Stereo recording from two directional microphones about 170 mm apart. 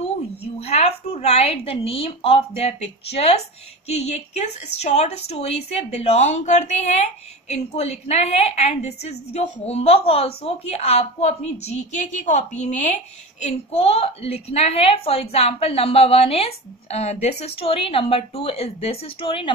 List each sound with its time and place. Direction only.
0.6 s a woman's voice: 40° left (ahead or behind)